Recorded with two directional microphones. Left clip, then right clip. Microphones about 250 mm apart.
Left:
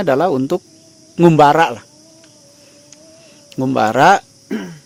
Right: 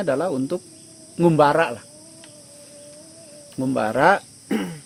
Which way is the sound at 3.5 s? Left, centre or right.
Left.